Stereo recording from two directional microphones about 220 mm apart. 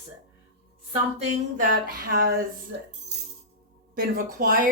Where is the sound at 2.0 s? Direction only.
40° right (ahead or behind).